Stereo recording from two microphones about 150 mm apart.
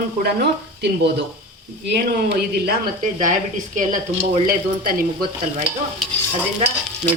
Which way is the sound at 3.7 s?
60° right (ahead or behind).